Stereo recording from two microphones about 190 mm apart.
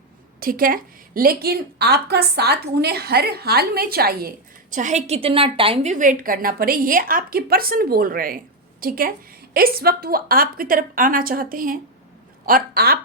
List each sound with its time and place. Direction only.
0.3 s a woman's voice: 50° right (ahead or behind)